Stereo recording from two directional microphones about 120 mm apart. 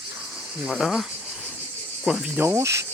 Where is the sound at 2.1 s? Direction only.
5° right (ahead or behind); by 2.8 s 25° right (ahead or behind).